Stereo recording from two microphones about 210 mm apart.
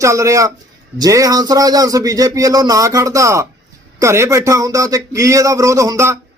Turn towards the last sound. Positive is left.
turn(degrees=-15)  # may be behind; listen again after turning